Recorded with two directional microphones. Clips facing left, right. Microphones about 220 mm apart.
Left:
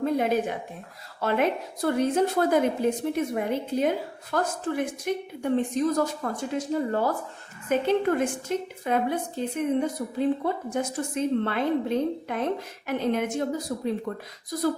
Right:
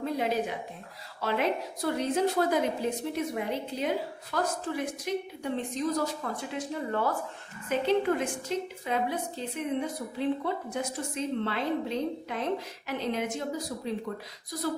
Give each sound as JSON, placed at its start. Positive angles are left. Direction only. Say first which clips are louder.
{"t": 0.0, "sound": "a woman's voice", "louder": "left 5 dB", "side_deg": 50}